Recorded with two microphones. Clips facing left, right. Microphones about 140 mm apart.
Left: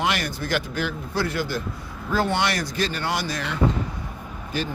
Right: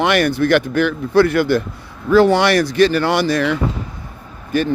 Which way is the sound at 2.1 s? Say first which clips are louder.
Right 11 dB; 80° right.